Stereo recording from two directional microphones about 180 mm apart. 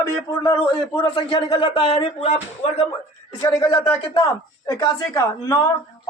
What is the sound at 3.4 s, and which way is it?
A man's voice, 15° left (ahead or behind).